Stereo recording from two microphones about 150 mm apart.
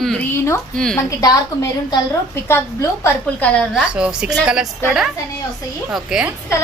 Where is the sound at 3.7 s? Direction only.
5° right (ahead or behind).